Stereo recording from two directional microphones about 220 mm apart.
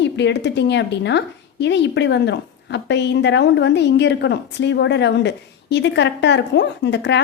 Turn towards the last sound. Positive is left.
turn(degrees=55)  # may be behind; listen again after turning